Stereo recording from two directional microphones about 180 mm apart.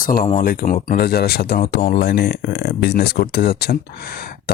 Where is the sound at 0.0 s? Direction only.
45° left (ahead or behind).